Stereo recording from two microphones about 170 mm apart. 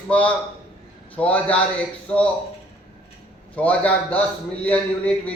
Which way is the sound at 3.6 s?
10° left (ahead or behind).